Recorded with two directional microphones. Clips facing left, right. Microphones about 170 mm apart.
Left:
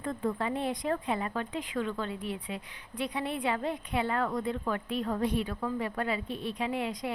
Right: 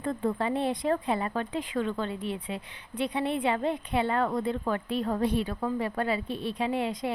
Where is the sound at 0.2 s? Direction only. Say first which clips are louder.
Right 3 dB; 30° right (ahead or behind).